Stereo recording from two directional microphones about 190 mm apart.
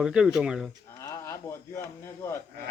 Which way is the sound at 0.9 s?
15° left (ahead or behind).